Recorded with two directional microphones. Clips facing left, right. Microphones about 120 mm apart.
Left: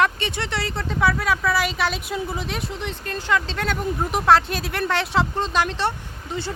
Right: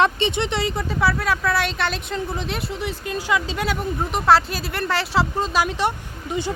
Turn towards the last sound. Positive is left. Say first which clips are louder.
# right 3 dB
turn(degrees=-15)  # may be behind; listen again after turning